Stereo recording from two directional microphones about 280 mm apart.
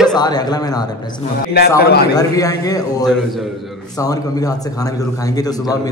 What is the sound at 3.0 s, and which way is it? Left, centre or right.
Speech, centre.